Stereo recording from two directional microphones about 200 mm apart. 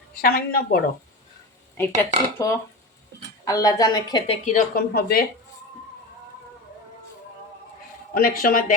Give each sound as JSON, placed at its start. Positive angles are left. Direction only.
{"t": 0.1, "sound": "speech", "side_deg": 45}
{"t": 1.7, "sound": "a woman's voice", "side_deg": 10}
{"t": 4.4, "sound": "speech", "side_deg": 45}
{"t": 8.1, "sound": "speech", "side_deg": 45}